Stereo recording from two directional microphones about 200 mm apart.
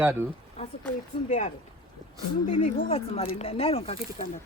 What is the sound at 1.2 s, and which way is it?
Speech, 40° left (ahead or behind).